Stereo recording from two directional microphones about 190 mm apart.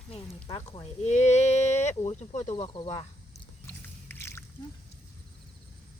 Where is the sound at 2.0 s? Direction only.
35° left (ahead or behind).